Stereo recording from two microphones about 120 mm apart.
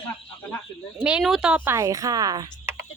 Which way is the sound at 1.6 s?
20° right (ahead or behind).